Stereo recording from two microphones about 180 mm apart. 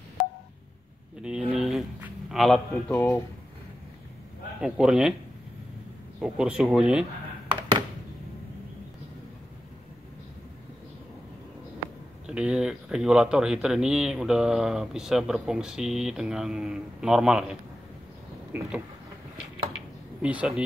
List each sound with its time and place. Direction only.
1.2 s a sound: 5° right (ahead or behind)
4.6 s speech: 5° right (ahead or behind)
6.2 s speech: 5° right (ahead or behind)
7.4 s a sound: 25° right (ahead or behind)
12.3 s speech: 5° right (ahead or behind)
18.5 s vehicle: 10° right (ahead or behind)
20.2 s speech: 5° right (ahead or behind)